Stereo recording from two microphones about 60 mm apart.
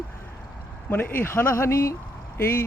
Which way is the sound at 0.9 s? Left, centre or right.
Left.